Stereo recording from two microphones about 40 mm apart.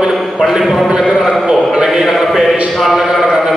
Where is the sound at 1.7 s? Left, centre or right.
Right.